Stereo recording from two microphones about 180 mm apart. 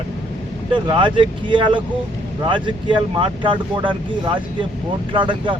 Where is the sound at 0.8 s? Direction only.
25° right (ahead or behind).